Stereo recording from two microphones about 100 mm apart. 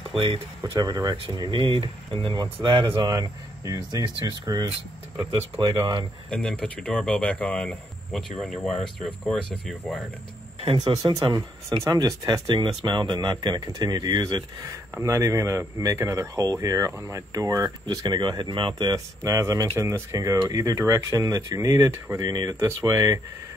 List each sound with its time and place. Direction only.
0.1 s speech: 65° right (ahead or behind)
0.6 s speech: 40° right (ahead or behind)
1.4 s speech: 55° right (ahead or behind)
3.2 s speech: 35° right (ahead or behind)
6.3 s speech: 5° left (ahead or behind)
10.8 s speech: 40° right (ahead or behind)
11.8 s speech: 35° right (ahead or behind)
15.0 s speech: 35° right (ahead or behind)
17.8 s speech: 50° right (ahead or behind)
19.2 s speech: 35° right (ahead or behind)
22.2 s speech: 40° right (ahead or behind)